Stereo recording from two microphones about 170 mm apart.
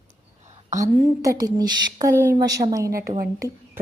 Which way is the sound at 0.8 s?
20° right (ahead or behind).